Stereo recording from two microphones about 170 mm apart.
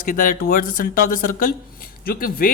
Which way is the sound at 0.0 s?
55° left (ahead or behind).